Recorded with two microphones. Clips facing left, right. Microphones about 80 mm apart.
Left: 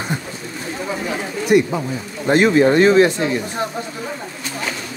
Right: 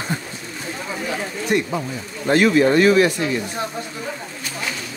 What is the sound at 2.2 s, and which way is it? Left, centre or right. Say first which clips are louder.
Speech: left 2 dB; left.